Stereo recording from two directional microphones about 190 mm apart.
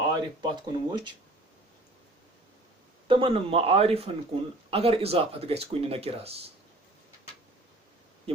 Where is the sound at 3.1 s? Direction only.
30° right (ahead or behind).